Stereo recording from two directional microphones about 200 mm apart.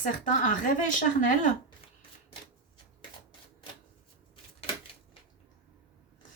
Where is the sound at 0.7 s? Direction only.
40° left (ahead or behind).